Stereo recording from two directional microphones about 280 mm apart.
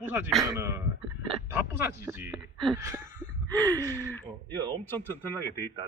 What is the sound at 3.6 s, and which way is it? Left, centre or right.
Speech, centre.